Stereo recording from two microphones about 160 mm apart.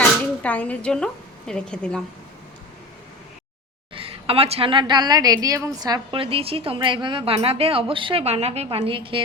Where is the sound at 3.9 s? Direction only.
35° right (ahead or behind).